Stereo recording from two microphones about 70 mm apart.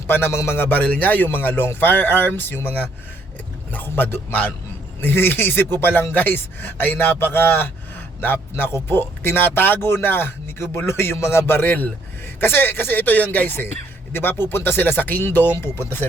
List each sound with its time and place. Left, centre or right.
0.1 s a man's voice: left